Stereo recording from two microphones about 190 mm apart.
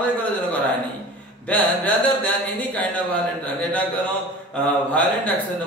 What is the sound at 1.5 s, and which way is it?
Speech, 5° left (ahead or behind).